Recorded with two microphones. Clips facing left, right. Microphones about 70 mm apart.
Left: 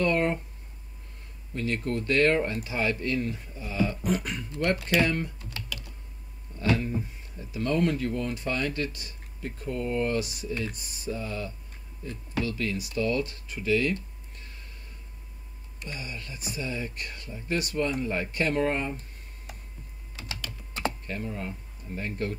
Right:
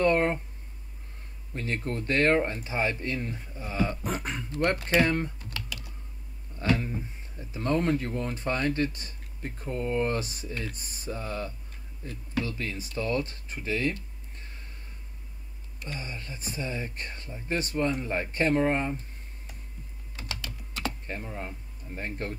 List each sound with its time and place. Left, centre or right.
0.0 s a sound: right
1.5 s speech: right
7.3 s speech: right
15.8 s speech: right
21.1 s speech: right